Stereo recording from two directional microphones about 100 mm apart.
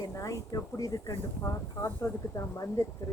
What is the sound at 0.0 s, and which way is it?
Speech, 30° left (ahead or behind).